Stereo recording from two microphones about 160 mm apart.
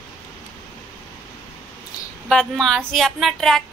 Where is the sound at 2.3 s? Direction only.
5° left (ahead or behind).